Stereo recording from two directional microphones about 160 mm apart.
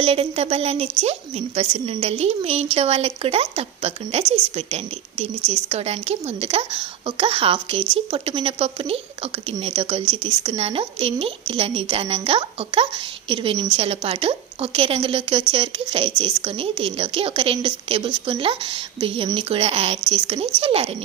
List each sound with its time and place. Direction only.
0.0 s a woman's voice: 40° right (ahead or behind)